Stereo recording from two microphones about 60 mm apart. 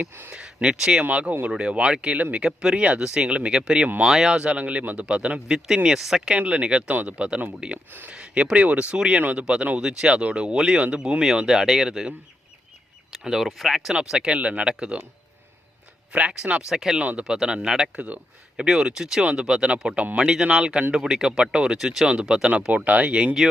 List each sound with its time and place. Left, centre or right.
0.3 s speech: centre
1.0 s speech: right; by 6.3 s centre
6.3 s speech: centre
13.2 s speech: centre
16.1 s speech: centre
17.0 s speech: right
17.3 s speech: centre
17.9 s speech: right